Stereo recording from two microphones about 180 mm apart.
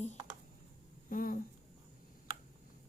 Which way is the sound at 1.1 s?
50° left (ahead or behind).